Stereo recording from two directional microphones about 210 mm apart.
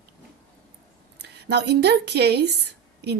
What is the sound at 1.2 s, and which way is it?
A woman's voice, 50° right (ahead or behind).